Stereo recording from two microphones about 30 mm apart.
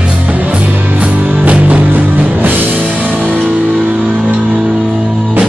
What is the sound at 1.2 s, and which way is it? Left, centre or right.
Music, right.